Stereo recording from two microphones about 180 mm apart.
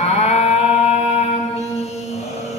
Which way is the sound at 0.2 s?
35° left (ahead or behind).